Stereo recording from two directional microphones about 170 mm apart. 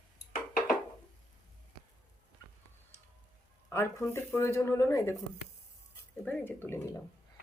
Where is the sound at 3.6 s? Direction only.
15° left (ahead or behind).